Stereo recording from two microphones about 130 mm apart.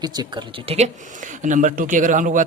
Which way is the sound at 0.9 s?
75° right (ahead or behind).